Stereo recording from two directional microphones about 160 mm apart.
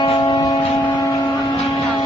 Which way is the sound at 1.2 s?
30° left (ahead or behind).